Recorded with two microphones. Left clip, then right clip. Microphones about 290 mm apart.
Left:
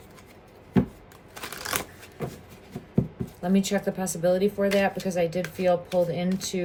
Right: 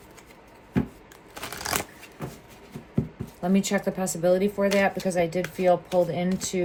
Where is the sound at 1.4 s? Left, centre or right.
Centre.